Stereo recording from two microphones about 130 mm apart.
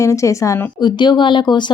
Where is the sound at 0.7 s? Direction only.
35° left (ahead or behind).